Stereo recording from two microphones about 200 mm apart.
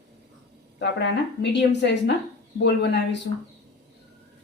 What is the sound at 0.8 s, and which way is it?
A woman's voice, 60° left (ahead or behind).